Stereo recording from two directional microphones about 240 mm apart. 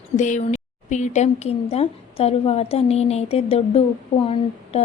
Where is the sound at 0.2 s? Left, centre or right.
Left.